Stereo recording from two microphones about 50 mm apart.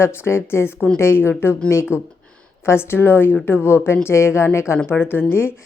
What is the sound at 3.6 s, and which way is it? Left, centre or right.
Speech, left.